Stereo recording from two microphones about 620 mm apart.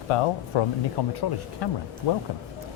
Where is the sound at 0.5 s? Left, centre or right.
Left.